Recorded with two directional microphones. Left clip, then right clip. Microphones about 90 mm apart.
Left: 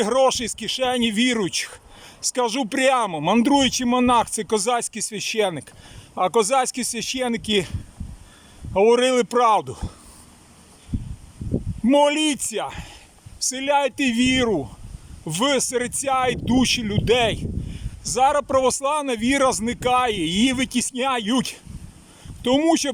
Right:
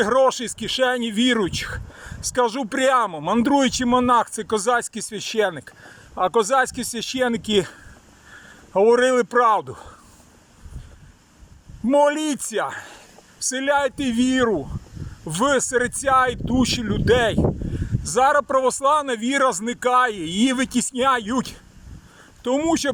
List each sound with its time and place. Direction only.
0.0 s speech: 15° left (ahead or behind)
11.9 s speech: 10° left (ahead or behind)